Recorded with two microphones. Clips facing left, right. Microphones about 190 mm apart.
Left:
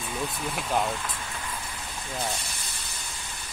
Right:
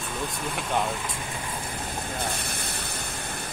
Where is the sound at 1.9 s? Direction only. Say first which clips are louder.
Left 1 dB; 55° right (ahead or behind).